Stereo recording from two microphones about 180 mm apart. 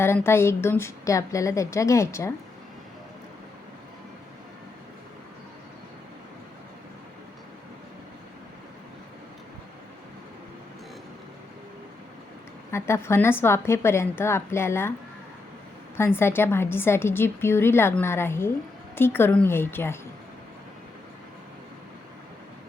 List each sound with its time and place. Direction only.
0.0 s a woman's voice: 15° left (ahead or behind)
12.7 s a woman's voice: 15° left (ahead or behind)
16.0 s a woman's voice: 15° left (ahead or behind)